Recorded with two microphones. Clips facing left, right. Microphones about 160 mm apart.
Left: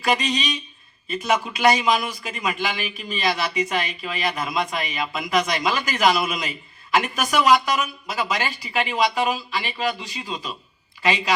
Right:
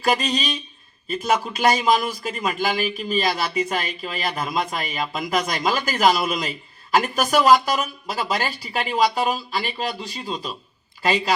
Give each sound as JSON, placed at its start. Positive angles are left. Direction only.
{"t": 0.0, "sound": "speech", "side_deg": -40}